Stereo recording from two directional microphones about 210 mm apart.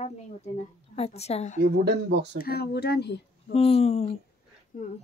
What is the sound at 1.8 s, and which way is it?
Speech, 55° right (ahead or behind).